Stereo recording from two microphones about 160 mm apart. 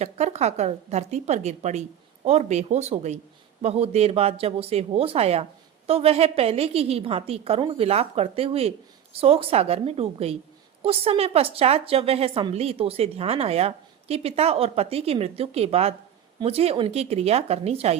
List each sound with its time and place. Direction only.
0.0 s a woman's voice: 45° right (ahead or behind)